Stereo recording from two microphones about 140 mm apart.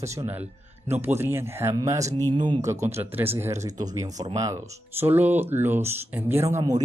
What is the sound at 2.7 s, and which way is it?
Speech, 20° right (ahead or behind).